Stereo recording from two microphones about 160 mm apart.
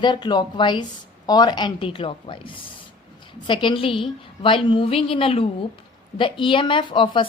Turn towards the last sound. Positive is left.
turn(degrees=30)  # may be behind; listen again after turning